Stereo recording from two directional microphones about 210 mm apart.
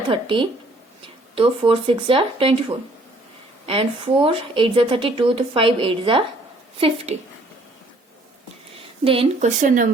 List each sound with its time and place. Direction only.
0.1 s a woman's voice: 25° right (ahead or behind)
9.0 s speech: 30° right (ahead or behind)